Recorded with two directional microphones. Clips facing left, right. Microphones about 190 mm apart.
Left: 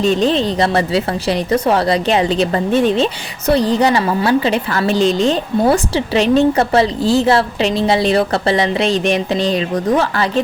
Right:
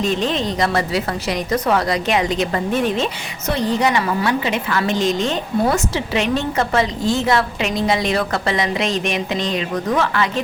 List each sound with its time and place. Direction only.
0.0 s a woman's voice: 35° left (ahead or behind)